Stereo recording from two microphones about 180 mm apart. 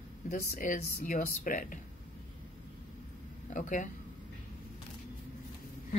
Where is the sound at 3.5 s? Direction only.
45° left (ahead or behind).